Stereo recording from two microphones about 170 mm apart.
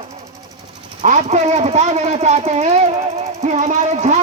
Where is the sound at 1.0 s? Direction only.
45° right (ahead or behind).